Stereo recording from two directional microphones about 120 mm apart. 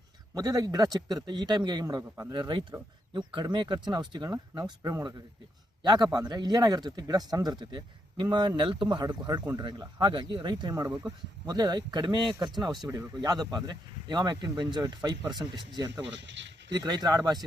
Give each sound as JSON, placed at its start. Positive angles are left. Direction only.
{"t": 0.3, "sound": "speech", "side_deg": -30}